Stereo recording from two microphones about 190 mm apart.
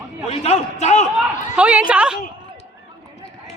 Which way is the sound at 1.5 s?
5° right (ahead or behind).